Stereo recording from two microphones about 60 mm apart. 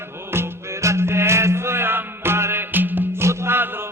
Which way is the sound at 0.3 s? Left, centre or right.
Right.